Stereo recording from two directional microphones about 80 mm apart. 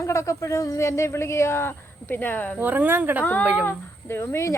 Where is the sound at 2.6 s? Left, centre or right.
Right.